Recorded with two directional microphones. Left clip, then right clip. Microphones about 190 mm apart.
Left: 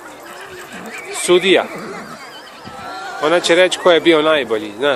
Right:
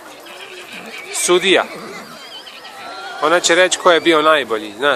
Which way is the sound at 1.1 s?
15° right (ahead or behind).